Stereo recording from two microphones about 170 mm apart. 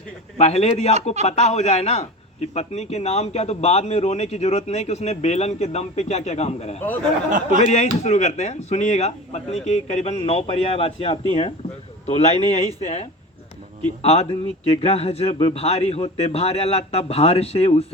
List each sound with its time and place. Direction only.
0.3 s a man's voice: 40° left (ahead or behind)
7.3 s speech: 50° right (ahead or behind)
7.6 s a man's voice: 40° left (ahead or behind)